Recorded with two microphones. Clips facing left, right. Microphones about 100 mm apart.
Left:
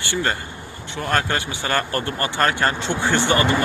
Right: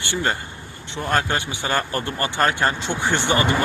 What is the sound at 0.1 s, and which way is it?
Speech, 20° right (ahead or behind).